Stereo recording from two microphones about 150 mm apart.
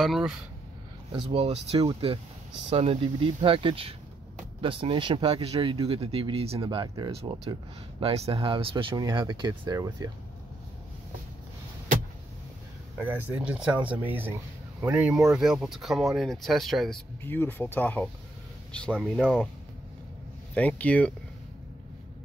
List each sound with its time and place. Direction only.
0.0 s speech: centre (ahead or behind)
1.1 s speech: 40° right (ahead or behind)
13.0 s speech: 10° right (ahead or behind)
17.2 s speech: 15° left (ahead or behind)
20.5 s speech: 10° left (ahead or behind)